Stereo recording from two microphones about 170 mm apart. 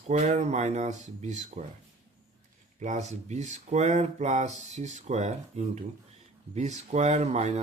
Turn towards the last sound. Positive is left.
turn(degrees=-40)  # may be behind; listen again after turning